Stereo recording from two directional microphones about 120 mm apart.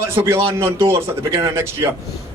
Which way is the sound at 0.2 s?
20° right (ahead or behind).